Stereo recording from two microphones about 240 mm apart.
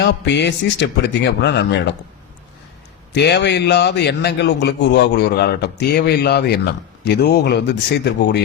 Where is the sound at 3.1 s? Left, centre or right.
Left.